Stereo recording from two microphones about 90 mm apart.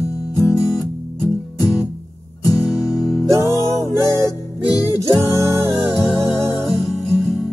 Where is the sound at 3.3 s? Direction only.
30° right (ahead or behind).